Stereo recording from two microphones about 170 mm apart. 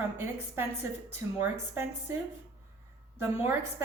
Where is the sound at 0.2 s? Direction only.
15° right (ahead or behind).